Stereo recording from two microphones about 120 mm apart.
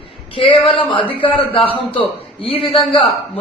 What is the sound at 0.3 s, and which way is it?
A man's voice, 45° left (ahead or behind).